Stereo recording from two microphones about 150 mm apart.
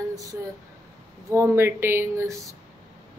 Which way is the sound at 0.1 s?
25° right (ahead or behind).